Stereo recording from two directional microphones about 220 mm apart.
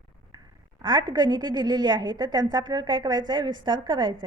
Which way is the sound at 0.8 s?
20° right (ahead or behind).